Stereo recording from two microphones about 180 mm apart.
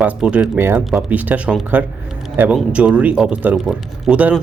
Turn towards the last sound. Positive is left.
turn(degrees=-5)  # may be behind; listen again after turning